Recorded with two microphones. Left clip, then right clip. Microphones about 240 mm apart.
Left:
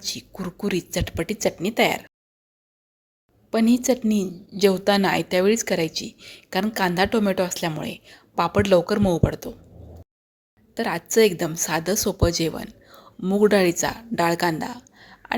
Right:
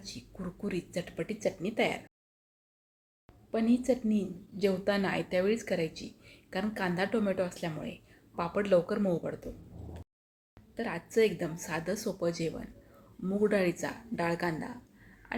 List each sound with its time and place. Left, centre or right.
0.0 s a woman's voice: left
3.5 s a woman's voice: left
10.8 s a woman's voice: left